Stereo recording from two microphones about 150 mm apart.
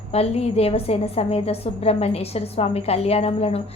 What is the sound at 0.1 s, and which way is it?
A woman's voice, 40° left (ahead or behind).